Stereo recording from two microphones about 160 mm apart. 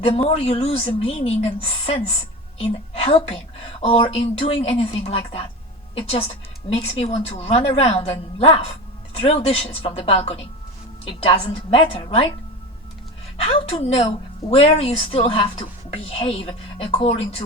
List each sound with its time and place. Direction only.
0.2 s a woman's voice: 35° left (ahead or behind)
2.6 s a woman's voice: 40° left (ahead or behind)
13.3 s a woman's voice: 35° left (ahead or behind)